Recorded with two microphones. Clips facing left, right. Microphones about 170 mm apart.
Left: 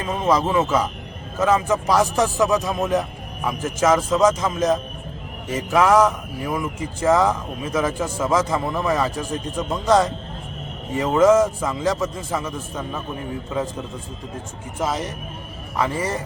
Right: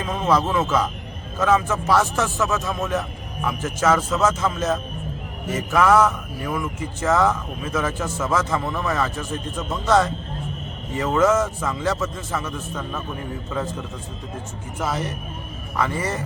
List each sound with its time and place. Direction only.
0.0 s speech: 10° left (ahead or behind)
15.8 s speech: 10° left (ahead or behind)